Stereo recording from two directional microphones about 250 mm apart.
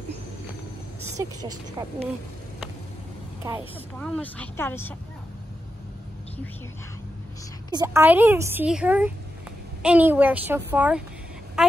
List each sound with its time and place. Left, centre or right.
1.1 s a woman's voice: centre
4.0 s speech: centre
7.7 s a woman's voice: centre